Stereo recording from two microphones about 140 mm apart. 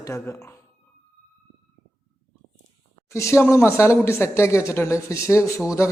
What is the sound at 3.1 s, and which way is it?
A man's voice, 20° left (ahead or behind).